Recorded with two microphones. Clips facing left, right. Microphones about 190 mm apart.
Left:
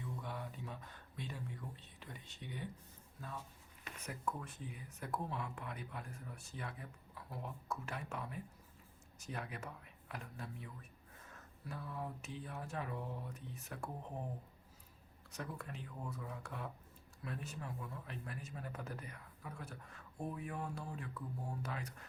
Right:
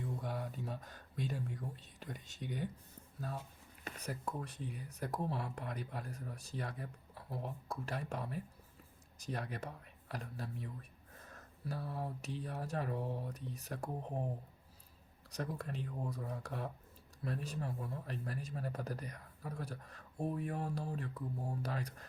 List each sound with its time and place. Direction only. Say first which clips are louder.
0.0 s a sound: right 4 dB; 40° right (ahead or behind)
3.8 s speech: right 1 dB; 35° right (ahead or behind)
15.3 s speech: right 5 dB; 35° right (ahead or behind)